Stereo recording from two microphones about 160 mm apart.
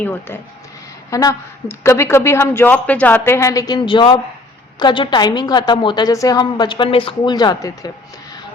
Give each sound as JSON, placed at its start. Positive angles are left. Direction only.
{"t": 0.0, "sound": "a woman's voice", "side_deg": 15}